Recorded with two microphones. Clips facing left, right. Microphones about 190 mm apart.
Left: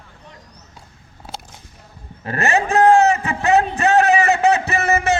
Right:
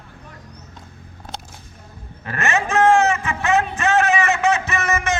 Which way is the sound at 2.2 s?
35° left (ahead or behind).